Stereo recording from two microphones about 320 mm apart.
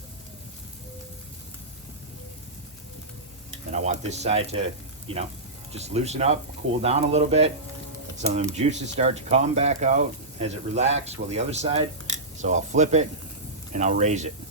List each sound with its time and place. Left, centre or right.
3.7 s speech: right